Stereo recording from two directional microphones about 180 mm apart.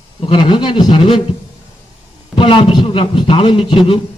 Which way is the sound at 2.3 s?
30° left (ahead or behind).